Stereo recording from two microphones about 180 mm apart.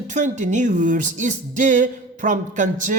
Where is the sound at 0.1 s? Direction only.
40° right (ahead or behind).